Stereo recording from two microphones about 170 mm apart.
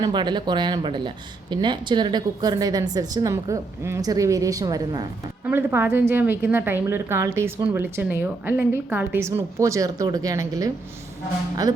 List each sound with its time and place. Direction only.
0.0 s speech: 25° right (ahead or behind)
5.5 s a woman's voice: 10° right (ahead or behind)